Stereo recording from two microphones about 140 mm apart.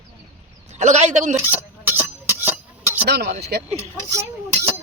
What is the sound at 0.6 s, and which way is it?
Speech, 55° right (ahead or behind).